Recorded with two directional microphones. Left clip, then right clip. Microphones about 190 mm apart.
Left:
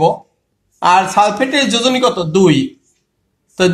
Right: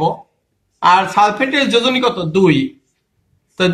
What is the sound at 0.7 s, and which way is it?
A man's voice, 50° left (ahead or behind).